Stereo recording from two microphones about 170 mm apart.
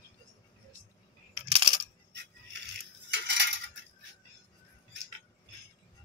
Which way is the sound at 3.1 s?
90° right.